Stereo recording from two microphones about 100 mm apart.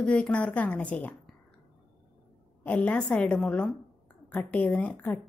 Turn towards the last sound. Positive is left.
turn(degrees=10)  # may be behind; listen again after turning